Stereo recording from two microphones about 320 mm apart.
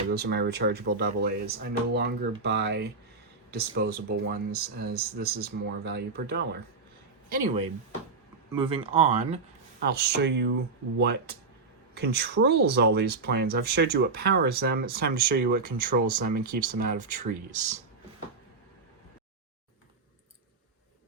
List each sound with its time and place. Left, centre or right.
0.1 s speech: right
9.8 s speech: right